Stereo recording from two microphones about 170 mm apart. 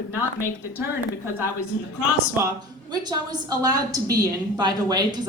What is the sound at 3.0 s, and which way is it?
A woman's voice, 25° right (ahead or behind).